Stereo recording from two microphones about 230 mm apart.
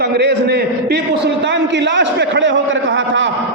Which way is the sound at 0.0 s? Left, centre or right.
Right.